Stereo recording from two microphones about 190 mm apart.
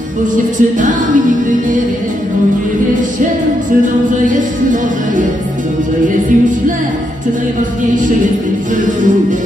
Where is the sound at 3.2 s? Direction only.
45° right (ahead or behind).